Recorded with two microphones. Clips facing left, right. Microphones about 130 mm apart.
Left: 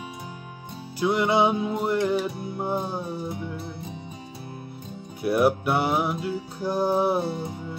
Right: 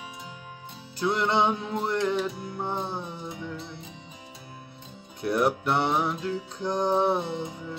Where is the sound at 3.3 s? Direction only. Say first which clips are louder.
Left 3 dB; 45° left (ahead or behind).